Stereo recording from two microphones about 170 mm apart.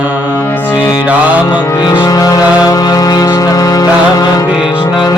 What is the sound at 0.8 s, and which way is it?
Music, 20° left (ahead or behind).